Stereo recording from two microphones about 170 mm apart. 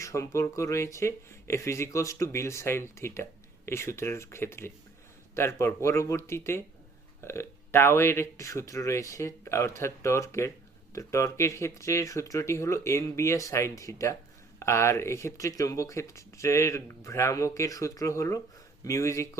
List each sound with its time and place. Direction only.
0.0 s speech: 20° left (ahead or behind)